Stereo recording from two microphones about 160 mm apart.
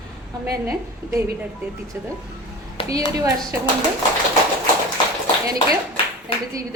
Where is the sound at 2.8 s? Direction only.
35° left (ahead or behind).